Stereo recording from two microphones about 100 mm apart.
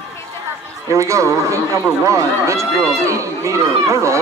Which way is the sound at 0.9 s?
30° right (ahead or behind).